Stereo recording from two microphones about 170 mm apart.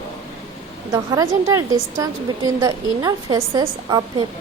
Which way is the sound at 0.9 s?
20° right (ahead or behind).